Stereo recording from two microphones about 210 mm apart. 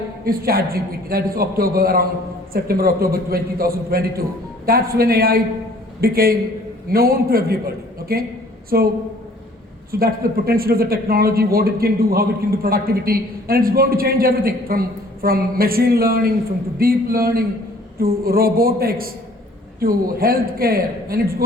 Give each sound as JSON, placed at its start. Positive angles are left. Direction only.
{"t": 0.3, "sound": "speech", "side_deg": -45}
{"t": 9.9, "sound": "speech", "side_deg": -45}